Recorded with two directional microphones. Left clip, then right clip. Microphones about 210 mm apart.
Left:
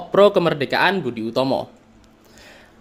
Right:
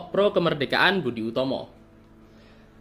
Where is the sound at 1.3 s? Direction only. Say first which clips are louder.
Left 7 dB; 20° left (ahead or behind).